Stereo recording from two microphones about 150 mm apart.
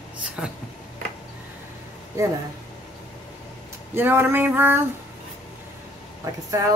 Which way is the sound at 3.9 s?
15° right (ahead or behind).